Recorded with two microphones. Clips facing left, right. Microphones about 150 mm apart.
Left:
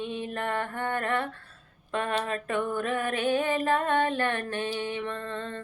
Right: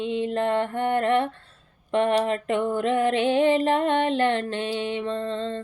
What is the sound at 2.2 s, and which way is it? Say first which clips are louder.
Music: right 5 dB; 20° right (ahead or behind).